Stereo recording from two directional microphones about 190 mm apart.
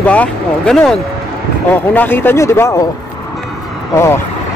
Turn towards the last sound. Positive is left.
turn(degrees=15)  # may be behind; listen again after turning